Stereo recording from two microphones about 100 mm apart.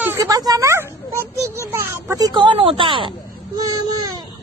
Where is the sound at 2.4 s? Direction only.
60° right (ahead or behind).